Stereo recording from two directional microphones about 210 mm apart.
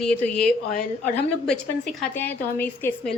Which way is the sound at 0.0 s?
5° left (ahead or behind).